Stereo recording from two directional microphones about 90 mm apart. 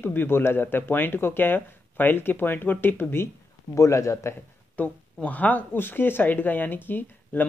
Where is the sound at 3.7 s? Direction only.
35° left (ahead or behind).